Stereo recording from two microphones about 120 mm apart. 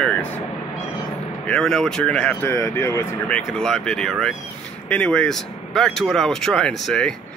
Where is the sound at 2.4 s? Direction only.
25° left (ahead or behind).